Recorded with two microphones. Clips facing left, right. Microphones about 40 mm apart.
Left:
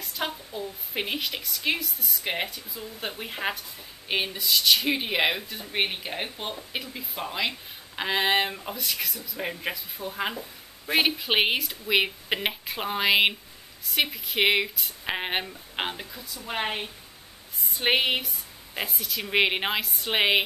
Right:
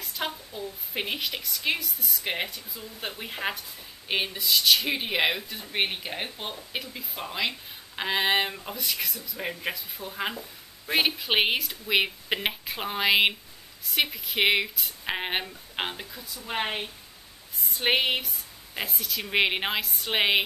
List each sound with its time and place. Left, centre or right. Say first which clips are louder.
0.0 s speech: left 1 dB; centre